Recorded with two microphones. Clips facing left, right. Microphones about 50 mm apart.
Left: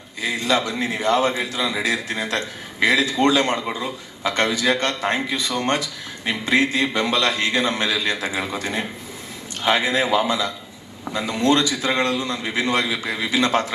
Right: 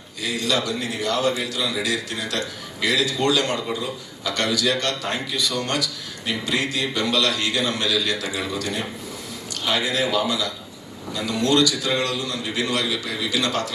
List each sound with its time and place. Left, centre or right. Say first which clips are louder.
0.2 s a man's voice: left 3 dB; left